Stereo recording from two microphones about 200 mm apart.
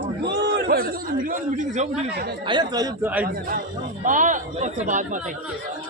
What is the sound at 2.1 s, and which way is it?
Speech, 55° right (ahead or behind).